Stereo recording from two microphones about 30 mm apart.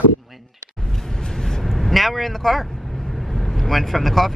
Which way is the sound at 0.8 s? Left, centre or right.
Centre.